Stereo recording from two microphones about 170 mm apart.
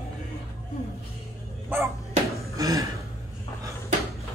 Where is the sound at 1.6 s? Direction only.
15° right (ahead or behind).